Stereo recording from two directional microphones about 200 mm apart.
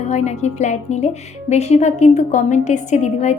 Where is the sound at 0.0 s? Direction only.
35° left (ahead or behind).